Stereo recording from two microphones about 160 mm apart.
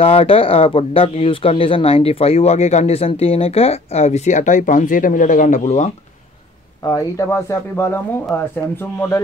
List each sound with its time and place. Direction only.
0.0 s speech: 40° left (ahead or behind)
6.8 s speech: 20° left (ahead or behind)